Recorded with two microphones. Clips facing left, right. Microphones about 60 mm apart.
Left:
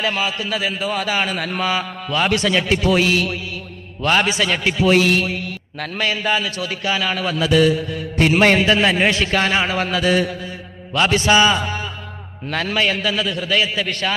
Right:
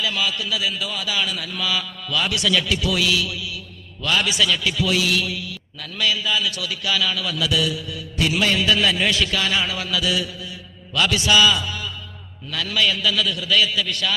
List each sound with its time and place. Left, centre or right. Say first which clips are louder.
0.0 s a man's voice: left 3 dB; left